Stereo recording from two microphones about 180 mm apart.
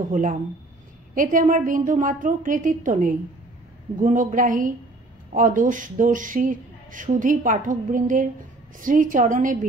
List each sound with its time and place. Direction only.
0.1 s speech: 45° right (ahead or behind)